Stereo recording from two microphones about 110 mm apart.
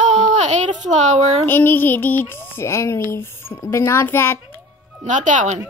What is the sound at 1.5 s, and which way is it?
Speech, 20° left (ahead or behind).